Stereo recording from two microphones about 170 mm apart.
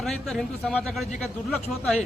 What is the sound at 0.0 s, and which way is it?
Speech, centre (ahead or behind).